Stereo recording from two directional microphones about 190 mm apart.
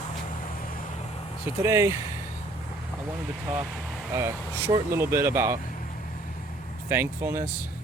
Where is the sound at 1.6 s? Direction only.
15° right (ahead or behind).